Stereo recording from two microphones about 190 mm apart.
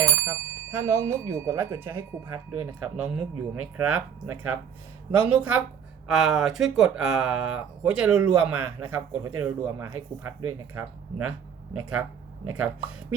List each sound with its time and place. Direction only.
0.3 s speech: 15° right (ahead or behind)